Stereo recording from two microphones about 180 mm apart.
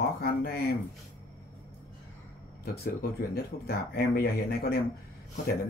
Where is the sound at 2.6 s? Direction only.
55° left (ahead or behind).